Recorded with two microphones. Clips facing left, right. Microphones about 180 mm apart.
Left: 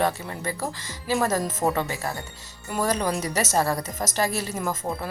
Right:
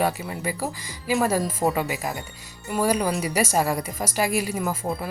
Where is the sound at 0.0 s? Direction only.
10° right (ahead or behind).